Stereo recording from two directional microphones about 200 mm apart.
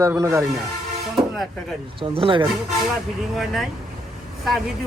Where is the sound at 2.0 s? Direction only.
25° right (ahead or behind).